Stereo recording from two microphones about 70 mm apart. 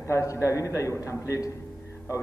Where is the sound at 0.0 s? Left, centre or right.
Left.